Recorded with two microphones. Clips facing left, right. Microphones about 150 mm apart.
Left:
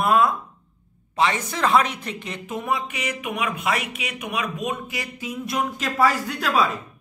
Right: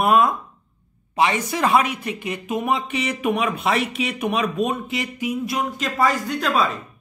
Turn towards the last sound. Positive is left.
turn(degrees=5)  # may be behind; listen again after turning